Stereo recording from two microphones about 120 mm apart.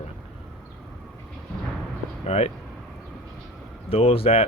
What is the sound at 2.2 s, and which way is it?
Speech, 60° left (ahead or behind).